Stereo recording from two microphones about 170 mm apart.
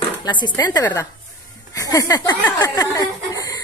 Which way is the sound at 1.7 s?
20° left (ahead or behind).